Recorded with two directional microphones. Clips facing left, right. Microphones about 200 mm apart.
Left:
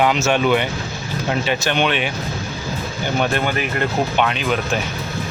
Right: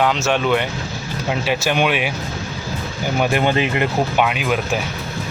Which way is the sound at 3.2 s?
15° right (ahead or behind).